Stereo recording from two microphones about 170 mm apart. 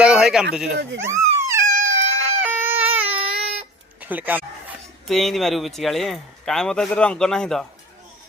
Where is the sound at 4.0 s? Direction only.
10° right (ahead or behind).